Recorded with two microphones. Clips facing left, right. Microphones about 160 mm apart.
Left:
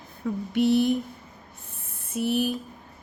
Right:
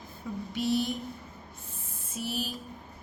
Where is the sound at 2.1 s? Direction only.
60° left (ahead or behind).